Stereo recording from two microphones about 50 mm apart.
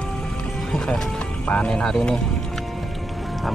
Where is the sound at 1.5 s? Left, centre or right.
Centre.